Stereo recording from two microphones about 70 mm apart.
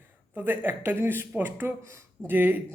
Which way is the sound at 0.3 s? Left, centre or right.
Right.